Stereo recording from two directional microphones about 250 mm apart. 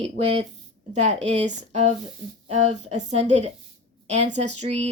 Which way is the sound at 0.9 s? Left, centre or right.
Right.